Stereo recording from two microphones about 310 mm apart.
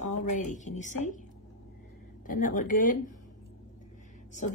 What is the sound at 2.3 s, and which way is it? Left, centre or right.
Speech, left.